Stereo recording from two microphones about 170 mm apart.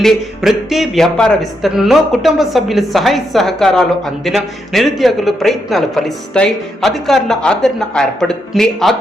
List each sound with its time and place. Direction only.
0.0 s speech: centre (ahead or behind)